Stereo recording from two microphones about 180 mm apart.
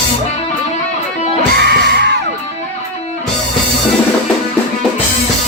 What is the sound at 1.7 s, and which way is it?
Music, 65° right (ahead or behind).